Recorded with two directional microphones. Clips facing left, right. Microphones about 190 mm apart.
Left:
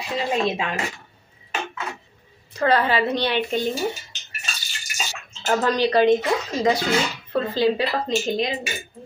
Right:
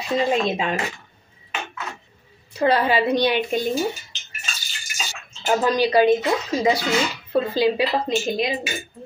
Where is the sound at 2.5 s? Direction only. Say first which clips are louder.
Right 1 dB; 10° right (ahead or behind).